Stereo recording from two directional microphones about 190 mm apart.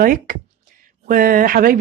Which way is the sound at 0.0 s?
50° right (ahead or behind).